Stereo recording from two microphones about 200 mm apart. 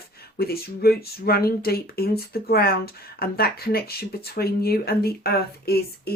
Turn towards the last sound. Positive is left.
turn(degrees=50)  # may be behind; listen again after turning